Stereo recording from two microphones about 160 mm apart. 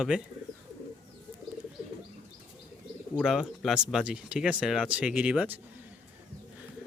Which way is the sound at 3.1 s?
5° right (ahead or behind).